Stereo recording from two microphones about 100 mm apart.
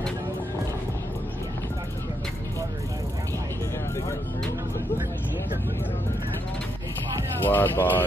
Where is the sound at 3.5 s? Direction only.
25° left (ahead or behind).